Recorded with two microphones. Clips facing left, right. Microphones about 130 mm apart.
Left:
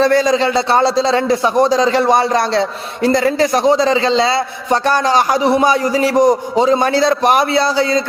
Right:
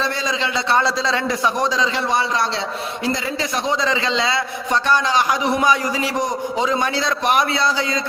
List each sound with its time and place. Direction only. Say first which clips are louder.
0.0 s a man's voice: left 11 dB; 45° left (ahead or behind)